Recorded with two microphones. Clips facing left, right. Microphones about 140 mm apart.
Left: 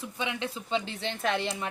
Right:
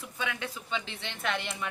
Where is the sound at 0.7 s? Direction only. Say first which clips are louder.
Left 7 dB; 35° left (ahead or behind).